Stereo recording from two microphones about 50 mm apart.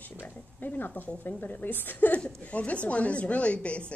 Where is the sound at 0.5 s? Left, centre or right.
Left.